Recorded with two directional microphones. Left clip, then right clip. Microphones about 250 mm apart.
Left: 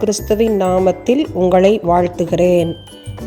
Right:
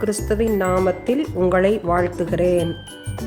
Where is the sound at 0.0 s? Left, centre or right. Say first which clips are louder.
Left 6 dB; centre.